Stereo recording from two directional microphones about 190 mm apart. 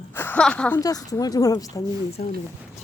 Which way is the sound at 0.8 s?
20° left (ahead or behind).